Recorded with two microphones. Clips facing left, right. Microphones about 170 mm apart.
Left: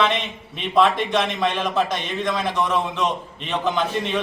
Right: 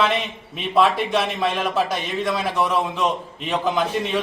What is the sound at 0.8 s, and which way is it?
A man's voice, 5° right (ahead or behind).